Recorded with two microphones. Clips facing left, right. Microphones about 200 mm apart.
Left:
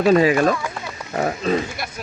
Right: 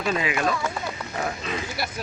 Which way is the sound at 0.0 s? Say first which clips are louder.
Left 10 dB; 40° left (ahead or behind).